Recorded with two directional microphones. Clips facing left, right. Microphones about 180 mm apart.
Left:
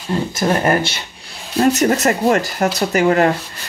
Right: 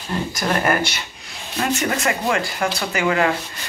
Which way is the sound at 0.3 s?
25° left (ahead or behind).